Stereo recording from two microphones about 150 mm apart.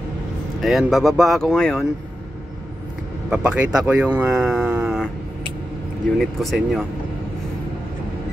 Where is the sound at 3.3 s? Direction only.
5° right (ahead or behind).